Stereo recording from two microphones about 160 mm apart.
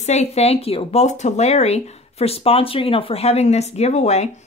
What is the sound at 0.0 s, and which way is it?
Speech, 45° left (ahead or behind).